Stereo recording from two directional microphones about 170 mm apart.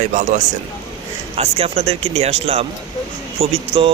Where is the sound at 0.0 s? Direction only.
45° right (ahead or behind).